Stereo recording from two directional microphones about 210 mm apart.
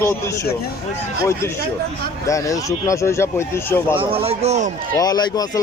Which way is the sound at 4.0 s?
25° right (ahead or behind).